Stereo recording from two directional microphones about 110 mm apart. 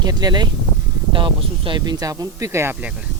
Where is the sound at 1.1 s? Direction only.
50° right (ahead or behind); by 2.7 s 25° right (ahead or behind).